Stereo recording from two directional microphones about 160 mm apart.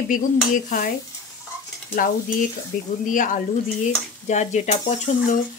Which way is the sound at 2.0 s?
60° left (ahead or behind).